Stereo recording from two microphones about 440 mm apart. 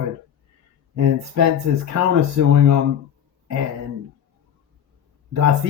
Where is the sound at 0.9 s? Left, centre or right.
Right.